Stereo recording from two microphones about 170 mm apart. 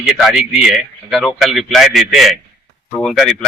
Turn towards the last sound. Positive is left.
turn(degrees=0)  # may be behind; listen again after turning